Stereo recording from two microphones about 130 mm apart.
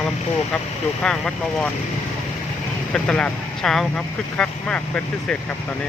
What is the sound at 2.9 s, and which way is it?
Speech, 5° left (ahead or behind).